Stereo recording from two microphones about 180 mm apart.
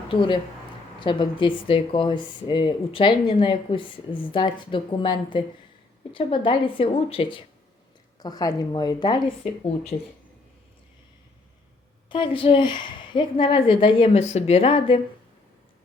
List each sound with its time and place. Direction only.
0.1 s speech: 30° left (ahead or behind)
12.0 s speech: 25° left (ahead or behind)